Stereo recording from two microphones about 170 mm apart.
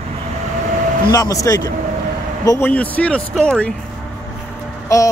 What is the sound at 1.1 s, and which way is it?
Speech, 20° left (ahead or behind).